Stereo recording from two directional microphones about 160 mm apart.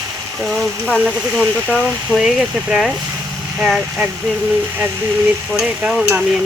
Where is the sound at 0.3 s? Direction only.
Centre (ahead or behind).